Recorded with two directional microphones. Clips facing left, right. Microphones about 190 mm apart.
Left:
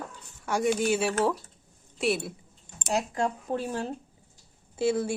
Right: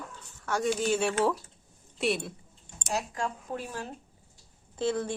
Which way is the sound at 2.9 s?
30° left (ahead or behind).